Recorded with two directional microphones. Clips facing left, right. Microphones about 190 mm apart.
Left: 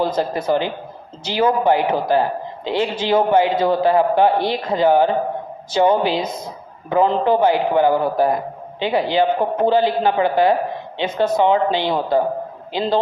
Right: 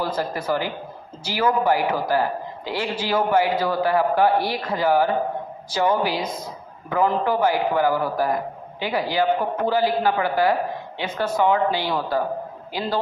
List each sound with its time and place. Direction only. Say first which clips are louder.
0.0 s a man's voice: left 5 dB; 20° left (ahead or behind)